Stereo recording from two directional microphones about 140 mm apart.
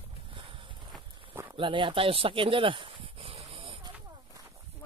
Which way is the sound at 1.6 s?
35° right (ahead or behind).